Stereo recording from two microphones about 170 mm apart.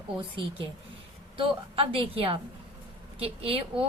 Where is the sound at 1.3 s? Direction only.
30° right (ahead or behind).